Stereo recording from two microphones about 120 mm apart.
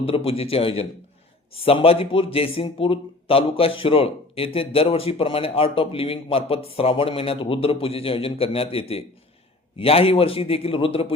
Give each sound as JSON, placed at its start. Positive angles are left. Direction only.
{"t": 0.0, "sound": "speech", "side_deg": 55}